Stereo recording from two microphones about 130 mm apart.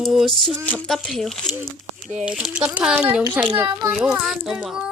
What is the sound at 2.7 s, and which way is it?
A child's voice, 10° right (ahead or behind).